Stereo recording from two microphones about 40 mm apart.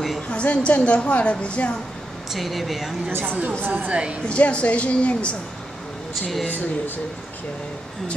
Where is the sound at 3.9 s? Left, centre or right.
Right.